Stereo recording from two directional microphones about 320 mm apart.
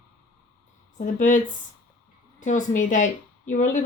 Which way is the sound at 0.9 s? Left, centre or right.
Left.